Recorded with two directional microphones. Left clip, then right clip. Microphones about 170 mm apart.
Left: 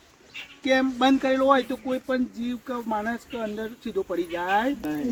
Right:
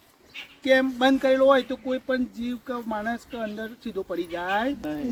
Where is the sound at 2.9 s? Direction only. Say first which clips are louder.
Left 2 dB; 20° right (ahead or behind).